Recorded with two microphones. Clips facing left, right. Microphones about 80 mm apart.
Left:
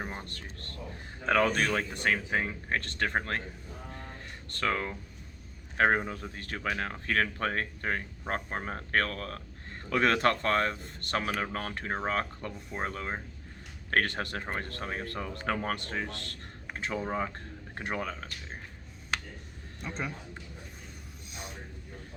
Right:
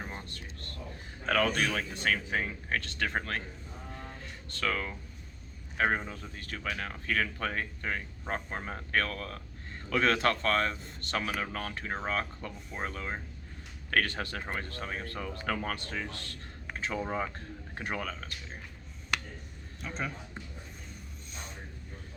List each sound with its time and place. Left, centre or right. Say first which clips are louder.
0.2 s speech: left 2 dB; left
1.3 s speech: left 2 dB; left
2.0 s speech: left 1 dB; left
2.8 s speech: left 2 dB; left
3.2 s speech: left 3 dB; left
4.6 s speech: left 2 dB; left
5.7 s speech: left 4 dB; left
6.7 s speech: left 2 dB; left
17.7 s speech: left 2 dB; left
19.8 s speech: even; centre